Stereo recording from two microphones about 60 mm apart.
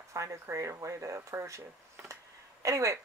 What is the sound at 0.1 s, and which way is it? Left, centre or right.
A woman's voice, right.